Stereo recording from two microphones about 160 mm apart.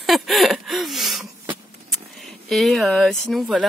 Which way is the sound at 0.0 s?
Centre (ahead or behind).